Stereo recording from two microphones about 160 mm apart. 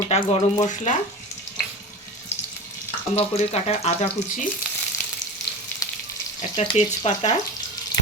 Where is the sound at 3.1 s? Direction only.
40° left (ahead or behind).